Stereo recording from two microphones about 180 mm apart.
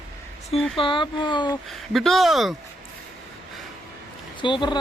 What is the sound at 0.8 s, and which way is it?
Speech, 25° left (ahead or behind).